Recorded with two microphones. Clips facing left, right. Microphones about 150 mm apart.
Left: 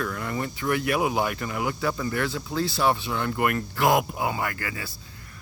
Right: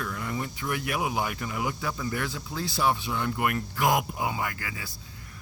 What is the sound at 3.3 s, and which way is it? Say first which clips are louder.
Speech: left 3 dB; 70° left (ahead or behind).